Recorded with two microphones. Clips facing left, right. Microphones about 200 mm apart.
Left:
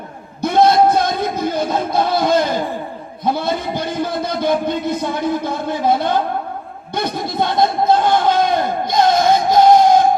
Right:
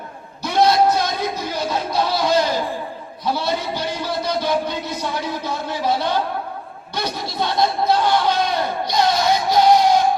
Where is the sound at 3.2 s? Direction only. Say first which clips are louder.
Left 3 dB; 50° left (ahead or behind).